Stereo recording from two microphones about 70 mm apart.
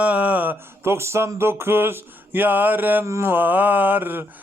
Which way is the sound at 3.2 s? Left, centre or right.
Right.